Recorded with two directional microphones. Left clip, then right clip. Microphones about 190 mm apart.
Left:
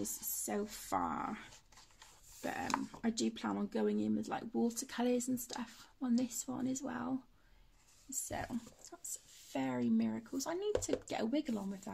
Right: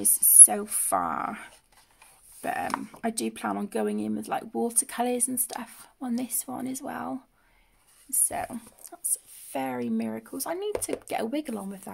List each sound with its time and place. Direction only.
0.0 s speech: 40° right (ahead or behind)